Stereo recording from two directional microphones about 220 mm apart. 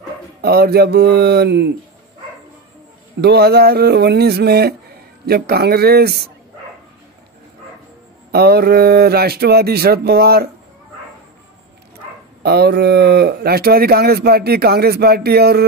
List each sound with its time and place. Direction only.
0.4 s speech: 45° right (ahead or behind)
3.2 s speech: 45° right (ahead or behind)
8.3 s speech: 45° right (ahead or behind)
12.4 s speech: 45° right (ahead or behind)